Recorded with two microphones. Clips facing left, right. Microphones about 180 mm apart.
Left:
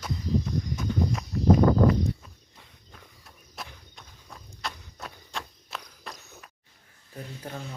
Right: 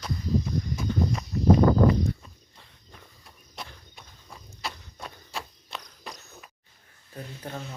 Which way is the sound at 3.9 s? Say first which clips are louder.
Left 1 dB; 5° right (ahead or behind).